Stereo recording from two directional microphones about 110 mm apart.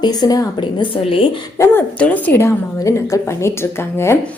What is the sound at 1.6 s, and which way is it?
A woman's voice, 20° left (ahead or behind).